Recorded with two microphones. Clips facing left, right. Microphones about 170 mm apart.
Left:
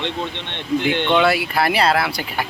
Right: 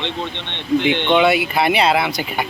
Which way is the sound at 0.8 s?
45° left (ahead or behind).